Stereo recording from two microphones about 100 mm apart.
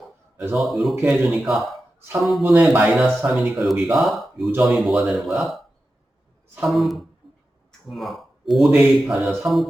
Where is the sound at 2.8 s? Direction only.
Centre (ahead or behind).